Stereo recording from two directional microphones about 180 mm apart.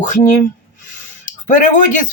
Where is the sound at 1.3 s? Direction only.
45° left (ahead or behind).